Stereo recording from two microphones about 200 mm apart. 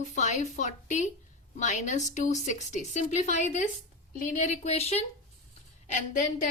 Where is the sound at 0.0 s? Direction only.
35° left (ahead or behind).